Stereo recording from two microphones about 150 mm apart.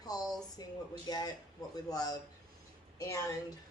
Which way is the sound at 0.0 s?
25° left (ahead or behind).